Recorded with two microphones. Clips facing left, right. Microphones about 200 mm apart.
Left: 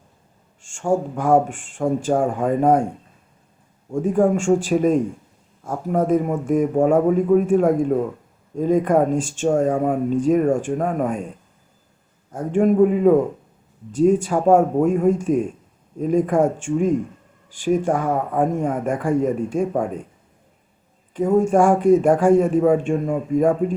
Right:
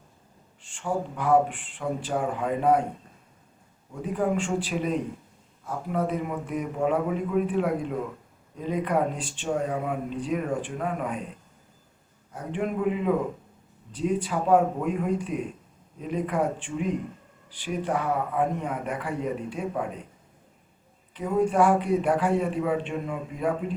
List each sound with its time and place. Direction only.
0.6 s speech: 45° left (ahead or behind)
3.9 s speech: 45° left (ahead or behind)
12.3 s speech: 45° left (ahead or behind)
21.1 s speech: 45° left (ahead or behind)